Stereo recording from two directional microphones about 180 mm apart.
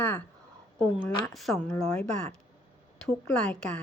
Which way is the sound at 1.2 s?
Centre (ahead or behind).